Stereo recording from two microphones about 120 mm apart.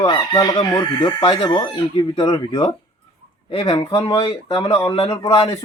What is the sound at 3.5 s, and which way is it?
Speech, 55° left (ahead or behind).